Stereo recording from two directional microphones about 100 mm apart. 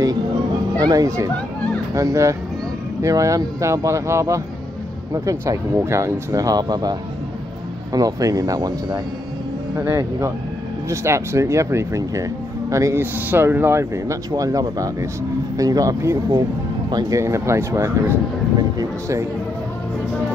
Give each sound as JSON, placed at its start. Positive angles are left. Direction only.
{"t": 0.7, "sound": "speech", "side_deg": -40}
{"t": 18.6, "sound": "speech", "side_deg": -35}